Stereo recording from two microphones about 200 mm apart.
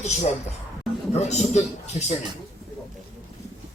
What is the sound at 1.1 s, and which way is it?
A man's voice, 35° left (ahead or behind).